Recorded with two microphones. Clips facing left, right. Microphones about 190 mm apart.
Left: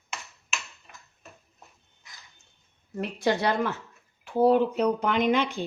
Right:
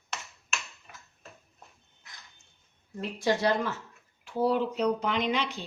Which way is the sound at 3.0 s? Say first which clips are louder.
Left 1 dB; 65° left (ahead or behind).